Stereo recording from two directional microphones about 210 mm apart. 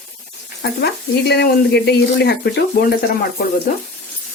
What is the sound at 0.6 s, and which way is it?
Speech, 50° left (ahead or behind).